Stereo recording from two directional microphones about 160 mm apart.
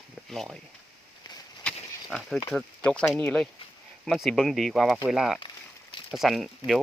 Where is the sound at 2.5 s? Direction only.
5° left (ahead or behind).